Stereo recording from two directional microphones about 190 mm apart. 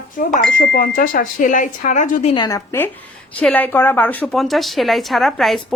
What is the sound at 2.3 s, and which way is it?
A woman's voice, 20° left (ahead or behind).